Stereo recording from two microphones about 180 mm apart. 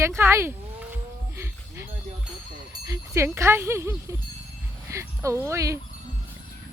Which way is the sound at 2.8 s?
15° right (ahead or behind).